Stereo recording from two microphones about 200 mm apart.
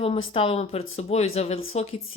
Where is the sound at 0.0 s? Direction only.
30° left (ahead or behind).